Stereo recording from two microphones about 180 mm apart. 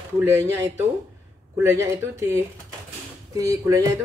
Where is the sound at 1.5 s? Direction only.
15° right (ahead or behind).